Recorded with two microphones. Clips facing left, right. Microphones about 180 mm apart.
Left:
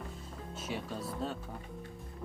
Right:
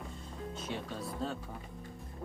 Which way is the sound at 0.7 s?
Centre (ahead or behind).